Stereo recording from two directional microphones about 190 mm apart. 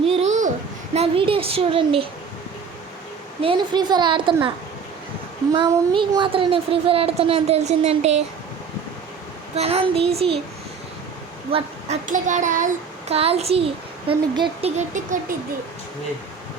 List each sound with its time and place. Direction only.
0.0 s a sound: 35° right (ahead or behind)
0.9 s a woman's voice: 30° right (ahead or behind)
3.4 s a woman's voice: 25° right (ahead or behind)
5.6 s speech: 25° right (ahead or behind)
9.6 s speech: 30° right (ahead or behind)
11.5 s a woman's voice: 40° right (ahead or behind)
14.8 s speech: 40° right (ahead or behind)